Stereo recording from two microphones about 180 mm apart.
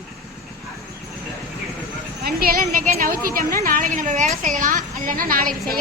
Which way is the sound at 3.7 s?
45° right (ahead or behind).